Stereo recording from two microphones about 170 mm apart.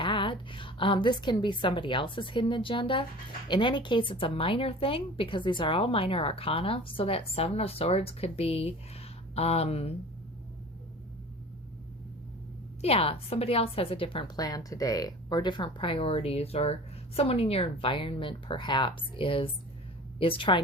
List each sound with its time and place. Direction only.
0.0 s a woman's voice: 30° left (ahead or behind)
12.8 s a woman's voice: 35° left (ahead or behind)